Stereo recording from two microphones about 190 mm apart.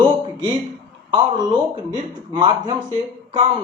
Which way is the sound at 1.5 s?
25° right (ahead or behind).